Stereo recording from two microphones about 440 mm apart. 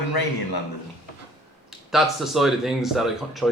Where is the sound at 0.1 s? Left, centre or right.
Left.